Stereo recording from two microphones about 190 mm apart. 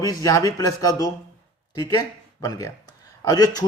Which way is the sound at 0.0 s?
20° left (ahead or behind).